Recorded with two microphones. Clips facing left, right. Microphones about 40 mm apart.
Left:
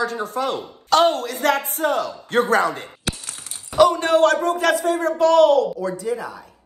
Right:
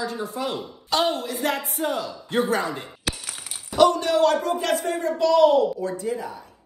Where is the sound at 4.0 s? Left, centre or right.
Left.